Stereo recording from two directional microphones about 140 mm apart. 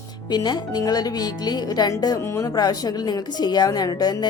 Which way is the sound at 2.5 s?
30° left (ahead or behind).